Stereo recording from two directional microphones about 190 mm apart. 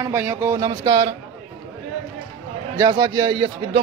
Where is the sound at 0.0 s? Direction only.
15° right (ahead or behind).